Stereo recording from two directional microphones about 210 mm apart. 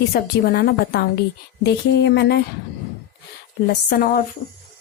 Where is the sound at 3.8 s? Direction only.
45° left (ahead or behind).